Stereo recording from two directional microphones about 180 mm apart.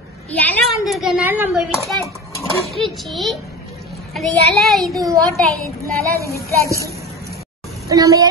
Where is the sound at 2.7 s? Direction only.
Centre (ahead or behind).